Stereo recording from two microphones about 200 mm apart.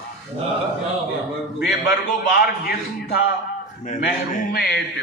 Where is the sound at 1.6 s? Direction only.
60° left (ahead or behind).